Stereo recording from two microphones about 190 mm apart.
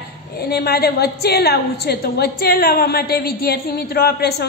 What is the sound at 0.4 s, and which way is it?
A woman's voice, 55° left (ahead or behind).